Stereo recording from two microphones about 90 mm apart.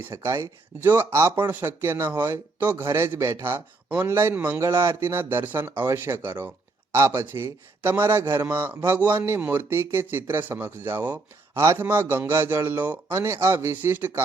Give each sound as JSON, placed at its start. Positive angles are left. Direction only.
{"t": 0.1, "sound": "speech", "side_deg": -35}